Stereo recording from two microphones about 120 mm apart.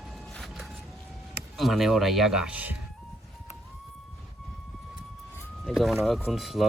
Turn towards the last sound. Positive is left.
turn(degrees=0)  # may be behind; listen again after turning